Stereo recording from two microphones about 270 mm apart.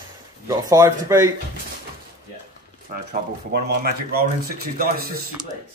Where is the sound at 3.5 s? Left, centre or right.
Right.